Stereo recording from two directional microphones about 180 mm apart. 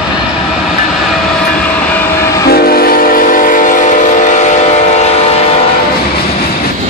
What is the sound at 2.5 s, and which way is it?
Train, 60° left (ahead or behind).